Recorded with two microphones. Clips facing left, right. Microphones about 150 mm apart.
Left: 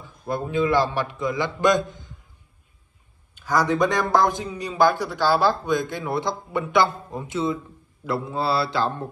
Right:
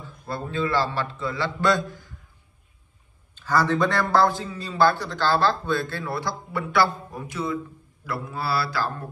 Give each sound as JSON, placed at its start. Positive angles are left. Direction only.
{"t": 0.0, "sound": "a man's voice", "side_deg": 15}
{"t": 3.3, "sound": "a man's voice", "side_deg": 15}
{"t": 8.0, "sound": "mantra", "side_deg": 25}